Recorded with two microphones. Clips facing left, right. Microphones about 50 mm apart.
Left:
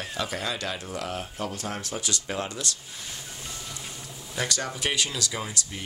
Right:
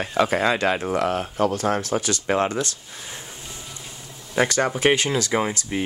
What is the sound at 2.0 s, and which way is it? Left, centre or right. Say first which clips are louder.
Speech: right 9 dB; right.